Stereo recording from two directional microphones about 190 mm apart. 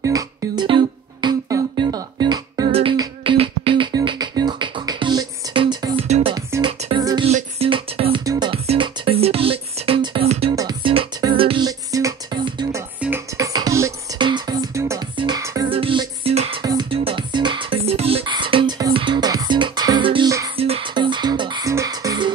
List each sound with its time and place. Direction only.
0.0 s music: 20° right (ahead or behind)
6.0 s music: 35° right (ahead or behind)
6.3 s music: 20° right (ahead or behind)
7.2 s music: 35° right (ahead or behind)
10.5 s music: 20° right (ahead or behind)
20.5 s music: 30° right (ahead or behind)